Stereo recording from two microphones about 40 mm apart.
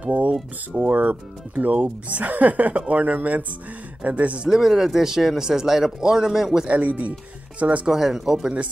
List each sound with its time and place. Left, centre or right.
0.0 s a sound: right
0.7 s speech: right
4.5 s speech: centre
6.7 s speech: right
7.8 s speech: centre